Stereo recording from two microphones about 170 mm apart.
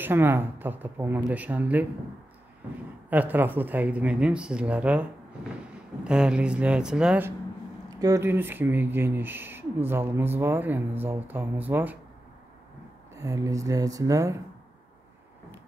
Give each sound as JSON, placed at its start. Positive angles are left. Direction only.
{"t": 0.0, "sound": "speech", "side_deg": -15}
{"t": 3.1, "sound": "speech", "side_deg": -10}
{"t": 13.1, "sound": "speech", "side_deg": -20}